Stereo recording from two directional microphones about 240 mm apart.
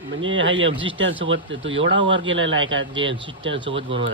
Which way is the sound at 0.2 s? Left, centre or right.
Right.